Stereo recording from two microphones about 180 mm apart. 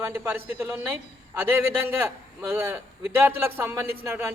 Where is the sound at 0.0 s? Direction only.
10° right (ahead or behind).